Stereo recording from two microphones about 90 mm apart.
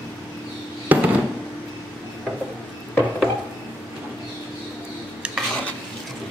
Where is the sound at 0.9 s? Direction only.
20° right (ahead or behind).